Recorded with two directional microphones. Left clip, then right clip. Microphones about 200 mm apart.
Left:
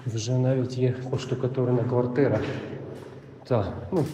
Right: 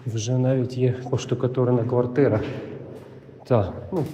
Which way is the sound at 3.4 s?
25° right (ahead or behind).